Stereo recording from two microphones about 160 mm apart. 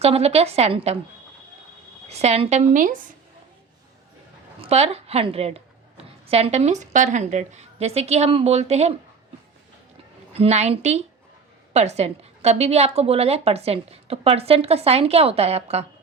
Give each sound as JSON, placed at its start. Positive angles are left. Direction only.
{"t": 0.0, "sound": "a woman's voice", "side_deg": -40}
{"t": 2.0, "sound": "a woman's voice", "side_deg": -40}
{"t": 4.6, "sound": "a woman's voice", "side_deg": -40}
{"t": 10.3, "sound": "a woman's voice", "side_deg": -40}